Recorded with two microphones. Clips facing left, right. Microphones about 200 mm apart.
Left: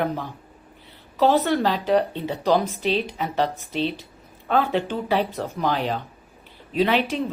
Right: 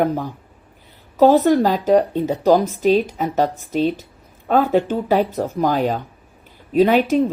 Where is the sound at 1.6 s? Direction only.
45° right (ahead or behind).